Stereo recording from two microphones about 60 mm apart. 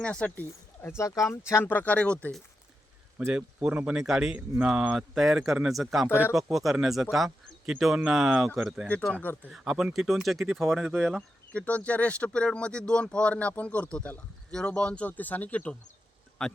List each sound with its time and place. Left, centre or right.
0.0 s speech: centre
0.3 s speech: left
0.9 s speech: left
1.3 s speech: left
1.6 s speech: left
3.2 s speech: centre
9.2 s speech: left
9.5 s speech: centre
11.5 s speech: left
16.4 s speech: centre